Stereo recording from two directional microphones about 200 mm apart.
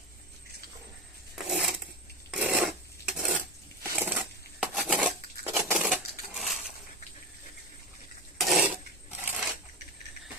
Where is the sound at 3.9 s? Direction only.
5° right (ahead or behind).